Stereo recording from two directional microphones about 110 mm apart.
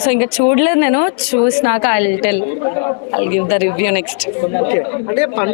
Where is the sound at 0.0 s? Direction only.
15° left (ahead or behind).